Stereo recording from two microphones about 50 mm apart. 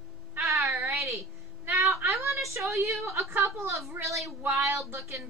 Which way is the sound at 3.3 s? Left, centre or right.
Right.